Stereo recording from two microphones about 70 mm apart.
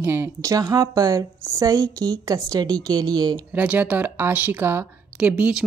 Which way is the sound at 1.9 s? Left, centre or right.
Right.